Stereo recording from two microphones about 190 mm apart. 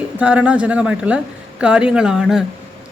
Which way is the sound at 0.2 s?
5° right (ahead or behind).